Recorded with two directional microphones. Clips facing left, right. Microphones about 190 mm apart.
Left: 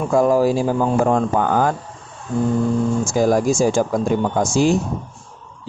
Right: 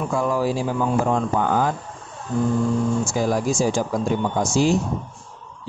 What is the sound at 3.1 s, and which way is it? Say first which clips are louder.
Speech: left 5 dB; 45° left (ahead or behind).